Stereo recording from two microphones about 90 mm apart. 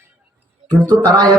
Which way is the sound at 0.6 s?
45° right (ahead or behind).